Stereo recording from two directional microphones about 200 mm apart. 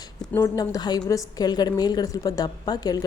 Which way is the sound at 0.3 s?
15° left (ahead or behind).